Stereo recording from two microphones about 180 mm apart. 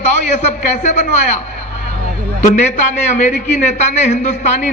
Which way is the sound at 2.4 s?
40° left (ahead or behind).